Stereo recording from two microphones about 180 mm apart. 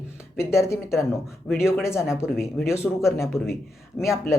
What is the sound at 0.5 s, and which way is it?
Speech, 15° left (ahead or behind).